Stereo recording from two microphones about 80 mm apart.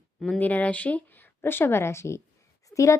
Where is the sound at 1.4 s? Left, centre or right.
Left.